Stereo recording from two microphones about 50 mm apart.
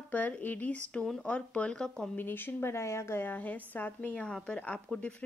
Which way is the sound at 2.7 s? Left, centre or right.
Left.